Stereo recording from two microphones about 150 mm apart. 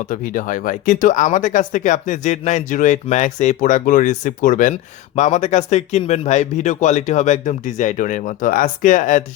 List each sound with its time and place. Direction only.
0.1 s speech: 60° left (ahead or behind)